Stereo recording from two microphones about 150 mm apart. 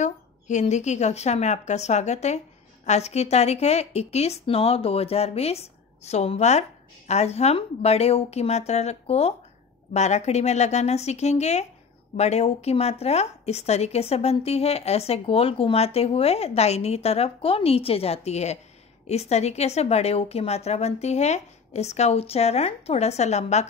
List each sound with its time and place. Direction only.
0.0 s a woman's voice: 50° left (ahead or behind)